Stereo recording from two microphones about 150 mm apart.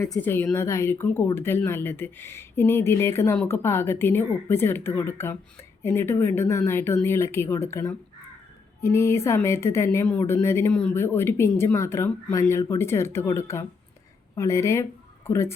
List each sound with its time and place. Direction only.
0.0 s speech: 15° left (ahead or behind)